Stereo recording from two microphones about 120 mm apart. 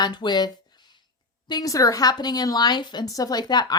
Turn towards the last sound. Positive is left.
turn(degrees=35)  # may be behind; listen again after turning